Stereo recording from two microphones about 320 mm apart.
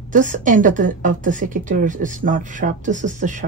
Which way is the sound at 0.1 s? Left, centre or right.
Right.